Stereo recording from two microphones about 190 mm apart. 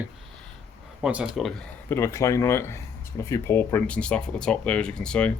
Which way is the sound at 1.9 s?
15° left (ahead or behind).